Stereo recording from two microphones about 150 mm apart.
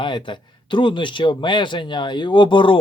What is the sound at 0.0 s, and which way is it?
Speech, 35° left (ahead or behind).